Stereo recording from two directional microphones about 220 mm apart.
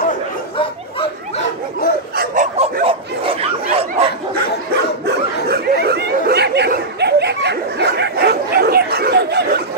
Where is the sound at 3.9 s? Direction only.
40° right (ahead or behind).